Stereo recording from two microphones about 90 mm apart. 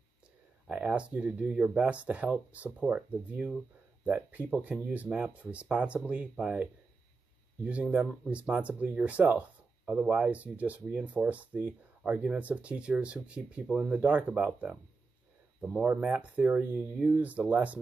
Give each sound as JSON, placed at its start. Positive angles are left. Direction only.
{"t": 0.7, "sound": "speech", "side_deg": -15}
{"t": 16.0, "sound": "speech", "side_deg": -15}